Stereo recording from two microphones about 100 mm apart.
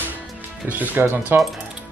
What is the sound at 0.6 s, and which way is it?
Speech, 20° right (ahead or behind).